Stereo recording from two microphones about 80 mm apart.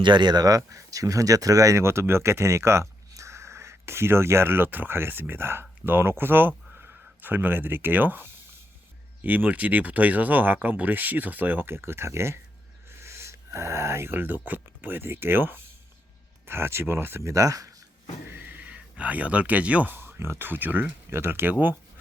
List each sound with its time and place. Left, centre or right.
0.0 s speech: right
13.0 s a sound: right
14.4 s speech: right
18.3 s speech: right
20.0 s speech: right